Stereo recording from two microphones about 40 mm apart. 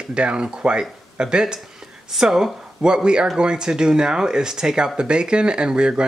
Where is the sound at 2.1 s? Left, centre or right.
Centre.